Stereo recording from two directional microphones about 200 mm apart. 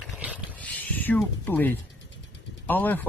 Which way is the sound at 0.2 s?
5° right (ahead or behind).